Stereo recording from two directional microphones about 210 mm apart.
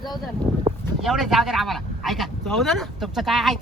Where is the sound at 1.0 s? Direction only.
Centre (ahead or behind).